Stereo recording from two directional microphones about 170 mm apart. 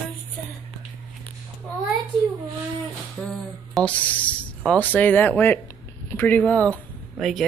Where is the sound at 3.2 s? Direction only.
5° left (ahead or behind).